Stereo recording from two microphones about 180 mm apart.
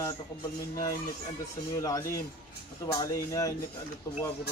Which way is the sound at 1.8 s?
20° left (ahead or behind).